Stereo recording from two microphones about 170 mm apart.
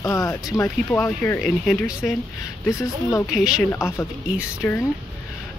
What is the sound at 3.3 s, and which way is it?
Speech, 5° right (ahead or behind).